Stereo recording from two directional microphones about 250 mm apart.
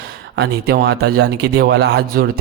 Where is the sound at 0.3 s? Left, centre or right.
Right.